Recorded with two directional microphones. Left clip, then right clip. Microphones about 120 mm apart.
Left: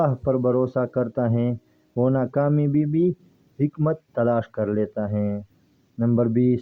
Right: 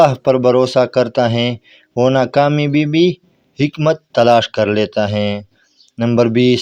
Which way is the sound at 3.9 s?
35° right (ahead or behind).